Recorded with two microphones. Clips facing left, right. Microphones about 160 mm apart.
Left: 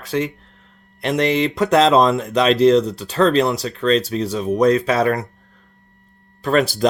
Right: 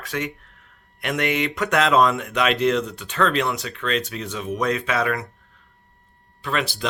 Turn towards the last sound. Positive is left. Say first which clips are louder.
# left 9 dB
turn(degrees=40)  # may be behind; listen again after turning